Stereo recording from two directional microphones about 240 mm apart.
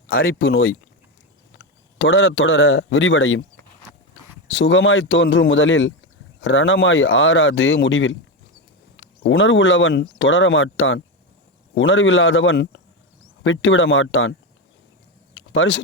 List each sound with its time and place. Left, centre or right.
0.1 s a man's voice: left
2.0 s a man's voice: left
4.4 s speech: left
15.4 s a sound: left